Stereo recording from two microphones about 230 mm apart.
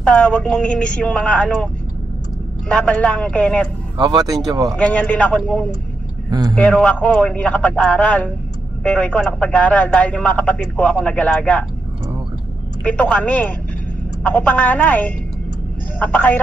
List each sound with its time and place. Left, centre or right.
0.0 s a man's voice: centre
2.7 s a man's voice: centre
4.0 s speech: centre
4.6 s a man's voice: centre
12.8 s a woman's voice: centre